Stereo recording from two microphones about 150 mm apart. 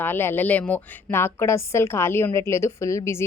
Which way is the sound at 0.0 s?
15° left (ahead or behind).